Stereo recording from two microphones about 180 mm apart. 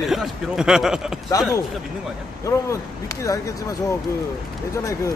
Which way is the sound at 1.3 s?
20° left (ahead or behind).